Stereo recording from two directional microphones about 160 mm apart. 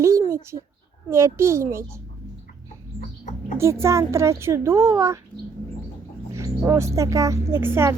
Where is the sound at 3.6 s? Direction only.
15° right (ahead or behind).